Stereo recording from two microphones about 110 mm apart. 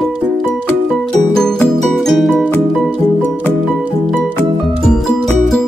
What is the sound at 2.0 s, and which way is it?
Music, centre (ahead or behind).